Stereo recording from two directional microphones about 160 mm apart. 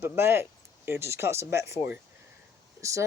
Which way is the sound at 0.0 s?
15° right (ahead or behind).